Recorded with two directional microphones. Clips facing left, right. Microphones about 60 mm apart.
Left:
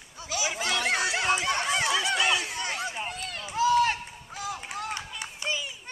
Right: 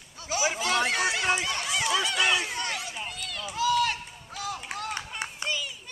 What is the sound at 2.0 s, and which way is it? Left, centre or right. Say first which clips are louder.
Chatter: even; left.